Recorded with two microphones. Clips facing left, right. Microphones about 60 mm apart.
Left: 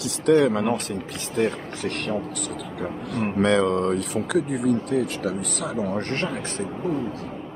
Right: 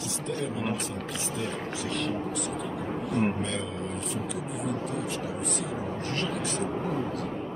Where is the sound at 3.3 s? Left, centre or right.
Left.